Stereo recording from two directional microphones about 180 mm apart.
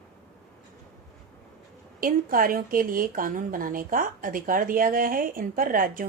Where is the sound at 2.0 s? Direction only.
50° right (ahead or behind).